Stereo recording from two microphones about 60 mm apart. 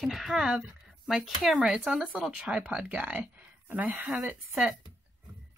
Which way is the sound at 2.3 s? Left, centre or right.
Right.